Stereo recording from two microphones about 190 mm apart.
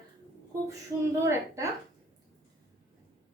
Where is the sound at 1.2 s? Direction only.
15° right (ahead or behind).